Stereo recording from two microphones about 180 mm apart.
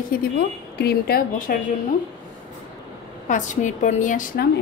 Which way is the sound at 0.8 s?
60° left (ahead or behind).